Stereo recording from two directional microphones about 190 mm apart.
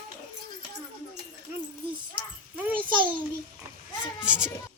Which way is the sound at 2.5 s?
10° right (ahead or behind).